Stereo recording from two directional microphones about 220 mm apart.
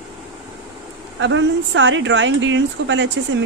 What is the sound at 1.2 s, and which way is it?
Speech, 55° right (ahead or behind).